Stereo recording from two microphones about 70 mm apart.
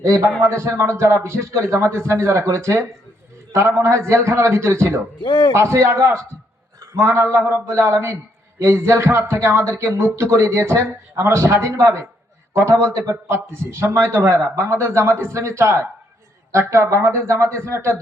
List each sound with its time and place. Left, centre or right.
0.0 s a man's voice: right